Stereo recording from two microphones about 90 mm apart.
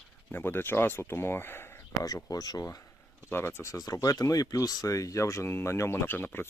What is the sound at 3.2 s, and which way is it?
Speech, 25° left (ahead or behind).